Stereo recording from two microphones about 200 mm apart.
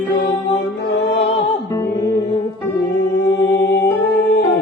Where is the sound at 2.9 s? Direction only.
55° left (ahead or behind).